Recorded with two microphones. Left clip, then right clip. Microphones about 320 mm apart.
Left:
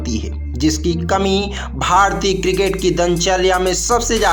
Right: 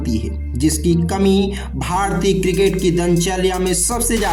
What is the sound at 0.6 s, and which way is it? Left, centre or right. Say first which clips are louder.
Speech: even; right.